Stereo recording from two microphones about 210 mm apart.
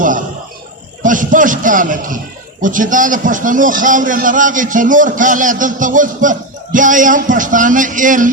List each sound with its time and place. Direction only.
1.0 s a man's voice: 40° right (ahead or behind)